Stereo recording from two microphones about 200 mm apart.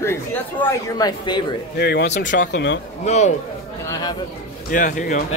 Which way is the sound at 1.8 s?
55° left (ahead or behind).